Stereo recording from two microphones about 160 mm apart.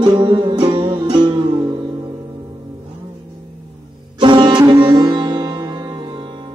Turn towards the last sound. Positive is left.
turn(degrees=-30)  # may be behind; listen again after turning